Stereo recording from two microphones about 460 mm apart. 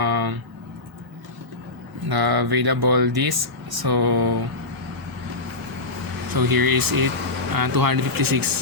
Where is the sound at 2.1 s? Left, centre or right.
Right.